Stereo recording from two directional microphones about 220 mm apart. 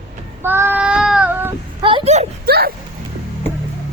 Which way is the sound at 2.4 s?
45° right (ahead or behind).